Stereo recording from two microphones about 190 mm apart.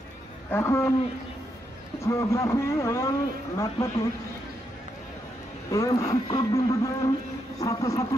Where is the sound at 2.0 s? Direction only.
15° left (ahead or behind).